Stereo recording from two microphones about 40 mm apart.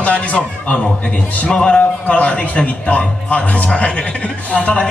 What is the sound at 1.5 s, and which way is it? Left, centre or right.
Speech, centre.